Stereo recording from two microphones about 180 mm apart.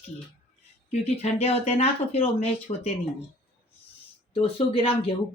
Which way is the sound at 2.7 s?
45° left (ahead or behind).